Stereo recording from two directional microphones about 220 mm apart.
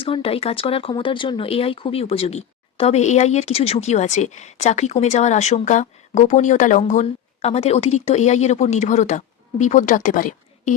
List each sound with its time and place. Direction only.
0.0 s speech: 25° left (ahead or behind)